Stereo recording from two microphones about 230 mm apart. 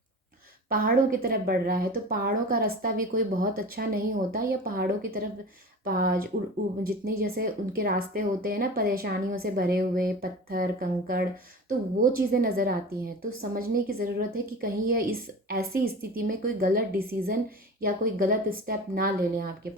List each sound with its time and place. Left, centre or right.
0.7 s a woman's voice: right